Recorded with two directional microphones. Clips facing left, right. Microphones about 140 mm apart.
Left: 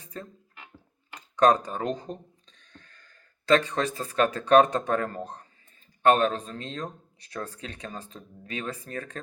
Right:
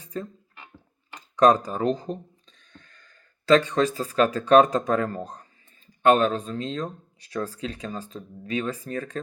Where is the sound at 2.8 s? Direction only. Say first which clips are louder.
Right 1 dB; 35° left (ahead or behind).